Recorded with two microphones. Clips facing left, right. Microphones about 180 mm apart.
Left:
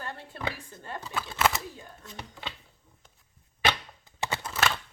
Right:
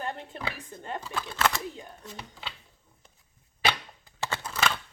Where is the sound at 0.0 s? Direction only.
20° right (ahead or behind).